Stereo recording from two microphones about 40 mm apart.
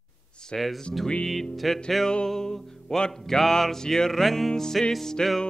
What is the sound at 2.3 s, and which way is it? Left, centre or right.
Music, centre.